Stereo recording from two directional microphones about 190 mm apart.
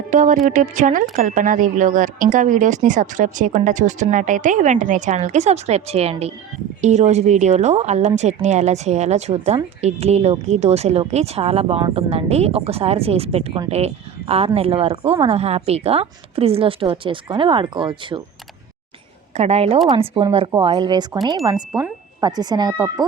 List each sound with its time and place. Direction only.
0.1 s speech: 40° right (ahead or behind); by 18.2 s 25° right (ahead or behind)
19.3 s speech: 35° right (ahead or behind)